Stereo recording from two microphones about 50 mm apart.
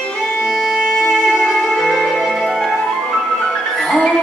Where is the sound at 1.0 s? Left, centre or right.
Centre.